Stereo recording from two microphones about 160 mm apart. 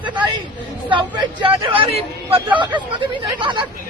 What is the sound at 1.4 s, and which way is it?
A man's voice, 35° right (ahead or behind).